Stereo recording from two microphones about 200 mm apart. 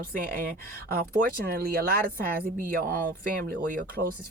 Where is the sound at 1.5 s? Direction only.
45° right (ahead or behind).